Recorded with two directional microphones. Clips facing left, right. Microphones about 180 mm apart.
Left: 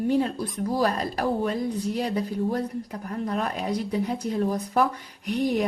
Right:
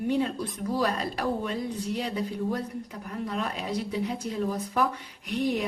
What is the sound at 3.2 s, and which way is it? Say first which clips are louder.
A woman's voice: left 4 dB; 50° left (ahead or behind).